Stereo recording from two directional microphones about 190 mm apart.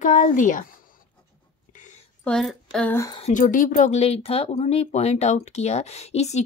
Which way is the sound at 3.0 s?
30° left (ahead or behind).